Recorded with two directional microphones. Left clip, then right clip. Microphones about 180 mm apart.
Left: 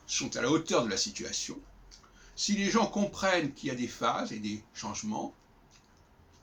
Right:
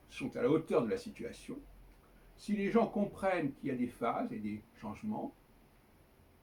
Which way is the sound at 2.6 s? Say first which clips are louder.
Left 2 dB; 15° left (ahead or behind).